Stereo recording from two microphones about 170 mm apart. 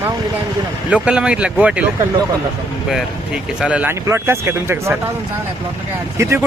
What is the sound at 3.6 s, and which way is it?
Speech, 10° right (ahead or behind).